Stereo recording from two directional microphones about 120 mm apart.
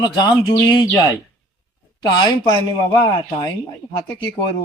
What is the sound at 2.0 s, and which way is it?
Mantra, 35° left (ahead or behind).